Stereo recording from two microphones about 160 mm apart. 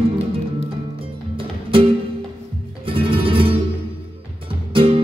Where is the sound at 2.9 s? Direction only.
35° right (ahead or behind).